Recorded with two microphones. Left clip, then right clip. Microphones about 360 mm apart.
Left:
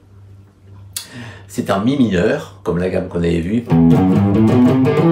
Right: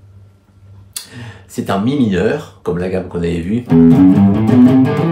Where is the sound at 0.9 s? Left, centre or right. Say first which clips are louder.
Even; centre.